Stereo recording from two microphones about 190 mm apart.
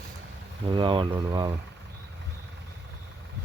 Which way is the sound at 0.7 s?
25° right (ahead or behind).